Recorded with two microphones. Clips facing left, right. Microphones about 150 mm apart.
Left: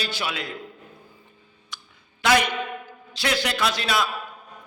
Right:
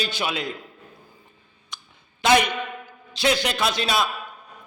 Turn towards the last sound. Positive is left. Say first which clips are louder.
# right 1 dB
turn(degrees=-25)  # may be behind; listen again after turning